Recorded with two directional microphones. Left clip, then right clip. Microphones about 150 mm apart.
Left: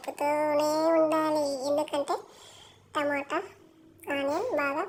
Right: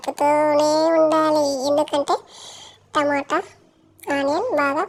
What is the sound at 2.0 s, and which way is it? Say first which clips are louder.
Speech: right 9 dB; 60° right (ahead or behind).